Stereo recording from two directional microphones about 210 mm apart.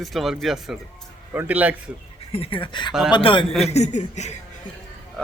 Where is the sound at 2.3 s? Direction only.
25° left (ahead or behind).